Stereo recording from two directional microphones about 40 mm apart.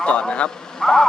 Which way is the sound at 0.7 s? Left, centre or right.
Centre.